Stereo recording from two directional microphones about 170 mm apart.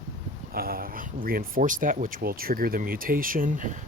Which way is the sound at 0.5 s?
60° right (ahead or behind).